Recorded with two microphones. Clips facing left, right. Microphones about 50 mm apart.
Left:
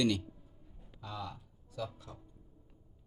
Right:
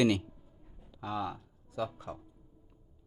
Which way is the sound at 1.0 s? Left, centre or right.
Right.